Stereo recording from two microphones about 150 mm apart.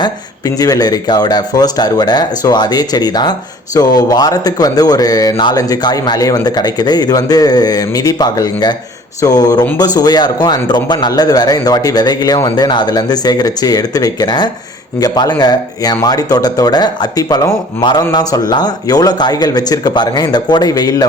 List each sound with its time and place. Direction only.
0.0 s speech: 25° left (ahead or behind)